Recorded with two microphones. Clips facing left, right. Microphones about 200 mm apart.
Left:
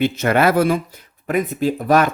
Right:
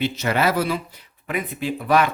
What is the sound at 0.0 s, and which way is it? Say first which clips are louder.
Speech: left 5 dB; 55° left (ahead or behind).